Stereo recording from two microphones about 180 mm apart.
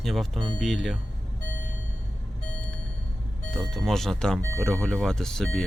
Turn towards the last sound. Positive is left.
turn(degrees=5)  # may be behind; listen again after turning